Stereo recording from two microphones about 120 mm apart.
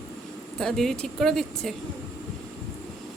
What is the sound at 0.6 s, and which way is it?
A woman's voice, 5° left (ahead or behind).